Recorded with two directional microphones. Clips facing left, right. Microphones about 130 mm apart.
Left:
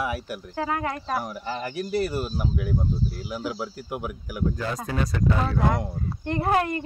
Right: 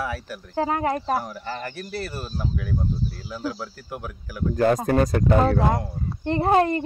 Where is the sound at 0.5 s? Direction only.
30° right (ahead or behind).